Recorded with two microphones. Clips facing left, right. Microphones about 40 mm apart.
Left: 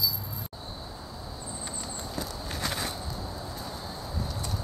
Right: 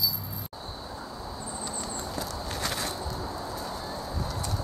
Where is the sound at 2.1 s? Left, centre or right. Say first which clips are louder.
Even; centre.